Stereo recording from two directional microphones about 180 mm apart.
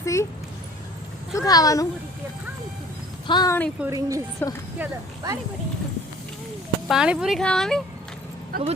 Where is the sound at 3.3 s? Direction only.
20° left (ahead or behind).